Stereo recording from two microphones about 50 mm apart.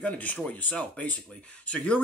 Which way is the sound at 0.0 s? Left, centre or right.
Left.